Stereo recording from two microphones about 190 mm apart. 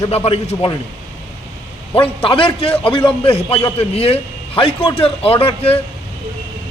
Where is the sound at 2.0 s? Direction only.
30° left (ahead or behind).